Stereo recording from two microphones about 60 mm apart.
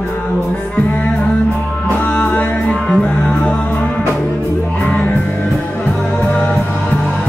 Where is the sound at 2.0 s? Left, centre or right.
Left.